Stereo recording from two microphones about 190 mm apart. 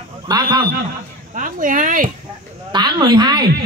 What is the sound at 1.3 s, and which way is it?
Speech, 45° right (ahead or behind).